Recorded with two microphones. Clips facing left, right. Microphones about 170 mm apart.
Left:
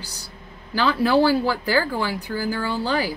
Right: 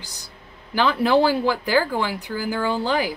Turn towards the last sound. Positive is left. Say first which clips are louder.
# right 1 dB
turn(degrees=-15)  # may be behind; listen again after turning